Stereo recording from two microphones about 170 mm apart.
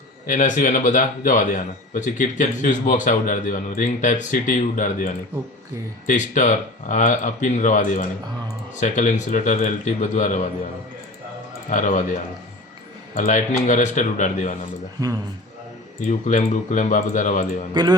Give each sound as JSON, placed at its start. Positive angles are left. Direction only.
{"t": 0.3, "sound": "a man's voice", "side_deg": 45}
{"t": 11.7, "sound": "a man's voice", "side_deg": 50}
{"t": 15.0, "sound": "a man's voice", "side_deg": -20}
{"t": 16.0, "sound": "a man's voice", "side_deg": 45}